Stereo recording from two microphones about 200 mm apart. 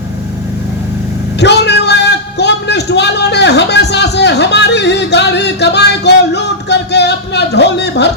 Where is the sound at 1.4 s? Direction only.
60° left (ahead or behind).